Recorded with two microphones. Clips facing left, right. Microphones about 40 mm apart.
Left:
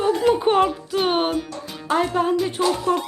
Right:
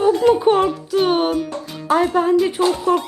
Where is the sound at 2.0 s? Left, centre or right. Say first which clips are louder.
Right 5 dB; centre.